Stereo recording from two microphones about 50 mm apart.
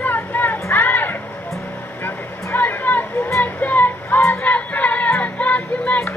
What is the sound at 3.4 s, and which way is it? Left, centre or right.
Music, left.